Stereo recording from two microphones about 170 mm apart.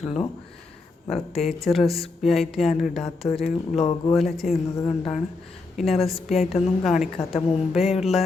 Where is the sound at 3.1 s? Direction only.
35° left (ahead or behind).